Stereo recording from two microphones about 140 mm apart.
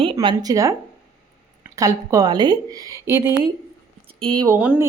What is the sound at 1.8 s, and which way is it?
Speech, 25° right (ahead or behind).